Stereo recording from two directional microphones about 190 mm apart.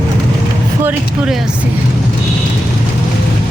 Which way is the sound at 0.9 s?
5° right (ahead or behind).